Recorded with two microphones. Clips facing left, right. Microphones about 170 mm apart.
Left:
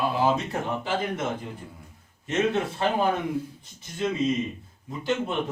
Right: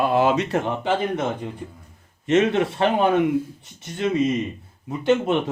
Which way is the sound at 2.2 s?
75° right (ahead or behind).